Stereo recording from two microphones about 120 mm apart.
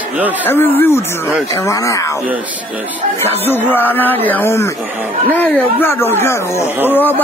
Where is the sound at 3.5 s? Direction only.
15° left (ahead or behind).